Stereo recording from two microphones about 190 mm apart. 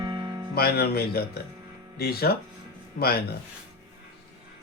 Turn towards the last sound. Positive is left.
turn(degrees=55)  # may be behind; listen again after turning